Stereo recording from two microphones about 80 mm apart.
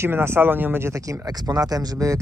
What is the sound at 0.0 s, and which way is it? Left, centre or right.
Speech, right.